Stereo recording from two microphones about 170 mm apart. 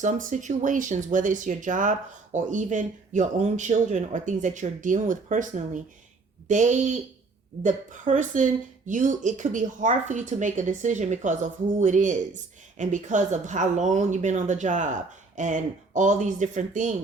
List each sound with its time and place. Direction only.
0.0 s speech: 50° right (ahead or behind)